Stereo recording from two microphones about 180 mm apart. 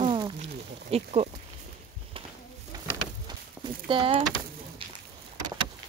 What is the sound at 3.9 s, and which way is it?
Speech, 30° right (ahead or behind).